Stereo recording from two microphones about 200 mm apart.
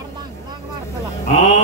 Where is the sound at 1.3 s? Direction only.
35° left (ahead or behind).